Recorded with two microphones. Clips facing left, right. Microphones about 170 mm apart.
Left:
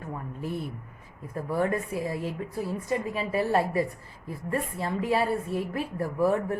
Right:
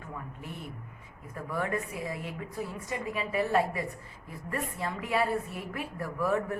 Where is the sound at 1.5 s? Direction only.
30° left (ahead or behind).